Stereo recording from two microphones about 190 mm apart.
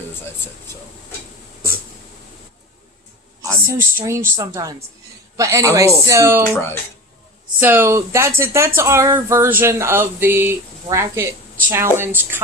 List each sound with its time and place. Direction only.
3.4 s speech: 15° right (ahead or behind)
7.6 s speech: 10° right (ahead or behind)